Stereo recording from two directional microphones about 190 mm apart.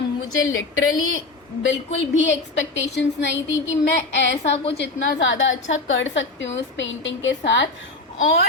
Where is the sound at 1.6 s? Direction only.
75° left (ahead or behind).